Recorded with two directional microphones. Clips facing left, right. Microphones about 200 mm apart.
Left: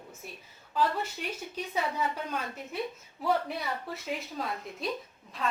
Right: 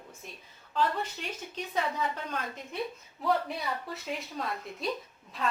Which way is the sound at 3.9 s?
Centre (ahead or behind).